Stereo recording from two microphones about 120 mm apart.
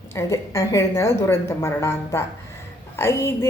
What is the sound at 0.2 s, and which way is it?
A woman's voice, 25° left (ahead or behind).